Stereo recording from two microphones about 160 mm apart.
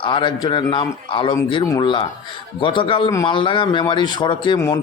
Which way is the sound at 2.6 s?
30° left (ahead or behind).